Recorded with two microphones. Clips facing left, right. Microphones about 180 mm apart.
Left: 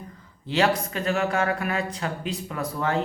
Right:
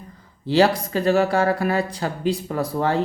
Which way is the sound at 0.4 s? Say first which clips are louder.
Right 5 dB; 35° right (ahead or behind).